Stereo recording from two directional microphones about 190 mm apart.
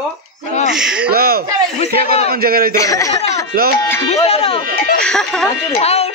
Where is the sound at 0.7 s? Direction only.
5° right (ahead or behind).